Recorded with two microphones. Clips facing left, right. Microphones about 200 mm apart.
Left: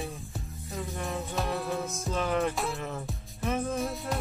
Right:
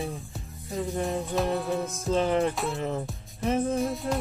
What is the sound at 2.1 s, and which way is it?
Music, 30° right (ahead or behind).